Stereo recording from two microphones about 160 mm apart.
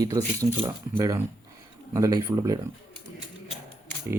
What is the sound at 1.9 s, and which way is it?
Speech, 20° right (ahead or behind).